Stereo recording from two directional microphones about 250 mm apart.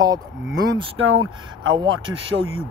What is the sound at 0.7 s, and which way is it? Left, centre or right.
Speech, right.